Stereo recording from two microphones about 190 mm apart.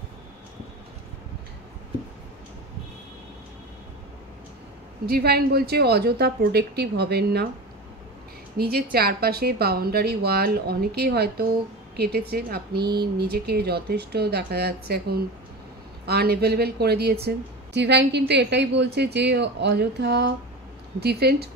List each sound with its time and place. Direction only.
5.0 s speech: 55° right (ahead or behind)
8.5 s speech: 55° right (ahead or behind)